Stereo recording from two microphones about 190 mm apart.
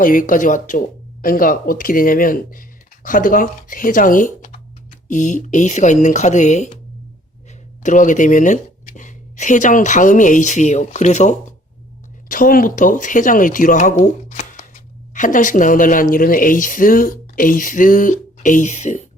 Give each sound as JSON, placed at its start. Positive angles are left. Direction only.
{"t": 0.0, "sound": "speech", "side_deg": 45}
{"t": 7.8, "sound": "speech", "side_deg": 40}